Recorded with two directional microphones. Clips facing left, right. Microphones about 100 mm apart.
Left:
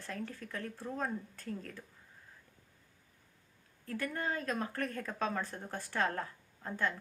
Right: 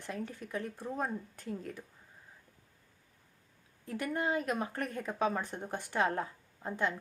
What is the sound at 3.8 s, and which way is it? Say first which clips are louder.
Speech: right 3 dB; 15° right (ahead or behind).